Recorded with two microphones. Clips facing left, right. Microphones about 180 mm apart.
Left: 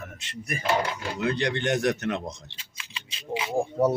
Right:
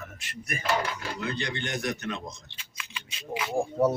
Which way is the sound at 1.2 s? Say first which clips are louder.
Left 8 dB; 70° left (ahead or behind).